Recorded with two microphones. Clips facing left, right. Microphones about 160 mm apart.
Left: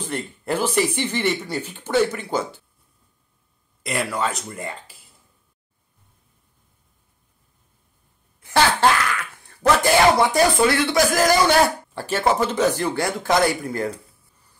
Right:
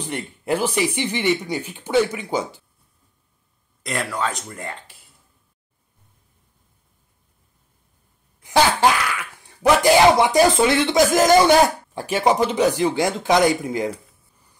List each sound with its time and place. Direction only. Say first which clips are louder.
0.0 s speech: even; 15° right (ahead or behind)
3.8 s speech: left 1 dB; 5° left (ahead or behind)
8.4 s speech: right 1 dB; 15° right (ahead or behind)